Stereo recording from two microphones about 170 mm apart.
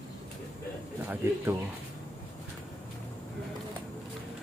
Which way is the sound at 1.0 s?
15° right (ahead or behind).